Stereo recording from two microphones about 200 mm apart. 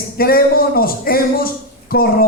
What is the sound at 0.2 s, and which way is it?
A man's voice, 50° left (ahead or behind).